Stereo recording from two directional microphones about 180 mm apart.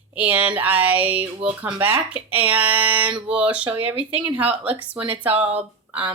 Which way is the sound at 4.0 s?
30° right (ahead or behind).